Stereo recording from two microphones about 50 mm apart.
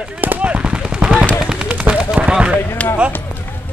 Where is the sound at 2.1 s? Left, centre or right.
Right.